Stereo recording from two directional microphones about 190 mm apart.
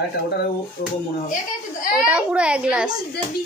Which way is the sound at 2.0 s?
5° right (ahead or behind).